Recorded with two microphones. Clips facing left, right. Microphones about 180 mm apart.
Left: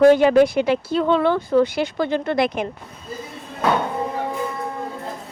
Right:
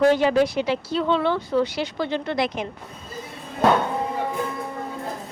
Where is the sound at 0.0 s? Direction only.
50° left (ahead or behind).